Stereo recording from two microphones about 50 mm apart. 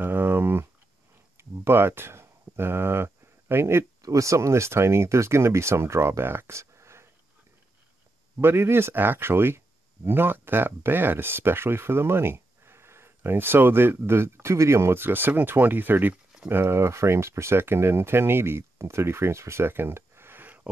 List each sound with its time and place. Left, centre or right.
0.0 s a sound: right
1.4 s speech: right
8.4 s speech: right
8.9 s speech: right
16.4 s speech: right
20.4 s a sound: right